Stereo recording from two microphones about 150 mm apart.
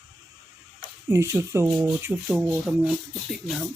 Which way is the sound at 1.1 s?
20° right (ahead or behind).